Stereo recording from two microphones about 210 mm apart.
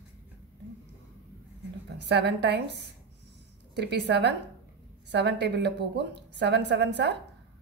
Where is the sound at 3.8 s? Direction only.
55° right (ahead or behind).